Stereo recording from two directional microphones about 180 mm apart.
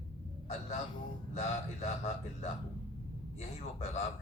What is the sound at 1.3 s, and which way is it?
Speech, 40° left (ahead or behind).